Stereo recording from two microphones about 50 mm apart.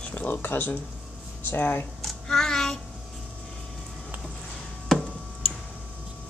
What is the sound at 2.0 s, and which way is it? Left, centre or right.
Child singing, centre.